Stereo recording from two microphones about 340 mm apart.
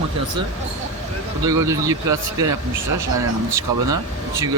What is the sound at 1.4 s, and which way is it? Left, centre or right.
Speech, centre.